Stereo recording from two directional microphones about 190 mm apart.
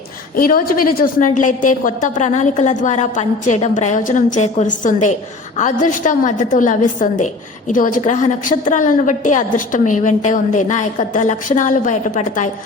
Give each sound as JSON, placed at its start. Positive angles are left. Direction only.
{"t": 0.3, "sound": "a woman's voice", "side_deg": 50}